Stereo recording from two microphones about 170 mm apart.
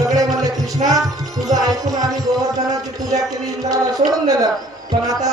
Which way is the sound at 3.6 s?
20° right (ahead or behind).